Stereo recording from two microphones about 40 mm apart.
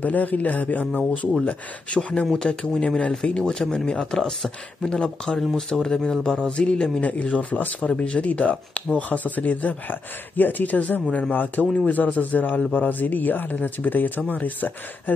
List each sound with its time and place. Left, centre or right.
0.0 s speech: left
2.4 s speech: left
7.0 s speech: left
7.8 s speech: left